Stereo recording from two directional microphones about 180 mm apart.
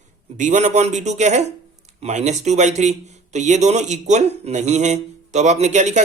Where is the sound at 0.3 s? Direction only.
45° right (ahead or behind).